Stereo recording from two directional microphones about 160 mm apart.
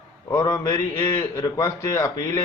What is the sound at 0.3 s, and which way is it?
A man's voice, 20° left (ahead or behind).